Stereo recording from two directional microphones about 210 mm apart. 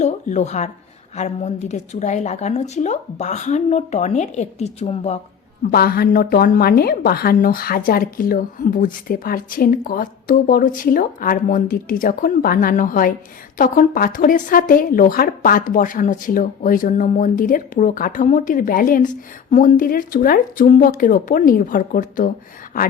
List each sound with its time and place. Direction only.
0.0 s a woman's voice: 35° left (ahead or behind)
5.6 s a woman's voice: 45° left (ahead or behind)